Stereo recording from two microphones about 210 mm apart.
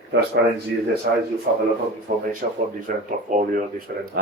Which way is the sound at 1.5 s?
45° right (ahead or behind).